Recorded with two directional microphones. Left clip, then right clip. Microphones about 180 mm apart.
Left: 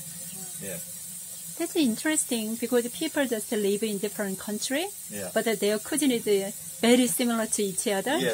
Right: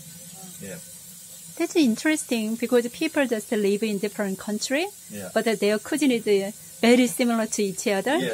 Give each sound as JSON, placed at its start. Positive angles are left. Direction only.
{"t": 1.6, "sound": "speech", "side_deg": -25}